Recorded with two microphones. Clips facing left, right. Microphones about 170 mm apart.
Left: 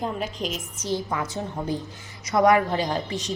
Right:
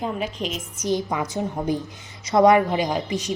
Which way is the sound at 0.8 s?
15° right (ahead or behind).